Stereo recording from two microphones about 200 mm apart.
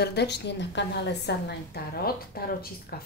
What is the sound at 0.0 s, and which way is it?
A woman's voice, 55° left (ahead or behind).